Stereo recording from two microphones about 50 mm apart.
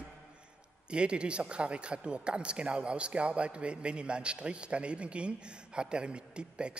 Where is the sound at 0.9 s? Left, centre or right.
Right.